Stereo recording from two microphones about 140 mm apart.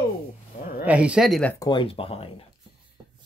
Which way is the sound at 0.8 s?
10° right (ahead or behind).